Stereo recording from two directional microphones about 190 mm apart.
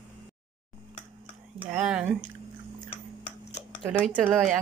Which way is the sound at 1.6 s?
5° right (ahead or behind).